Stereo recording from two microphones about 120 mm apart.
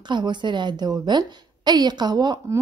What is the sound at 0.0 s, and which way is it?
A woman's voice, 40° right (ahead or behind).